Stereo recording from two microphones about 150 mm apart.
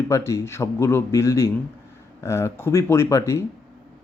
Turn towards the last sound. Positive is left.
turn(degrees=20)  # may be behind; listen again after turning